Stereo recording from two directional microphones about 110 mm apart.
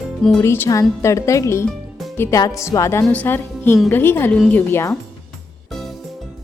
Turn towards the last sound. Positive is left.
turn(degrees=20)  # may be behind; listen again after turning